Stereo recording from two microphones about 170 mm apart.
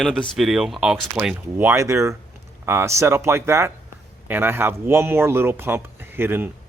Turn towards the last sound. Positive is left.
turn(degrees=-10)  # may be behind; listen again after turning